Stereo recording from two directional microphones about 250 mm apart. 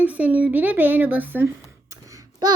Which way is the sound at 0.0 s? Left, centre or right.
Centre.